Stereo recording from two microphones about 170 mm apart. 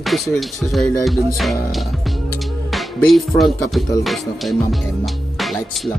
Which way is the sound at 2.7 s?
Centre (ahead or behind).